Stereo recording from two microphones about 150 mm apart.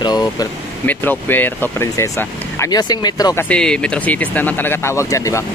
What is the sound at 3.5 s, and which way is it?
Speech, 5° left (ahead or behind).